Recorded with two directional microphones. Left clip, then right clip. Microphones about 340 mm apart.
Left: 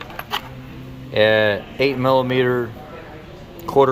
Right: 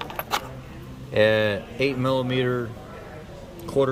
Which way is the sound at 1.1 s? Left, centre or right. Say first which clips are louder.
Left 4 dB; centre.